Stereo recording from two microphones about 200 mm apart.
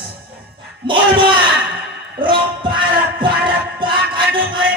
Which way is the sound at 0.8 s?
25° right (ahead or behind).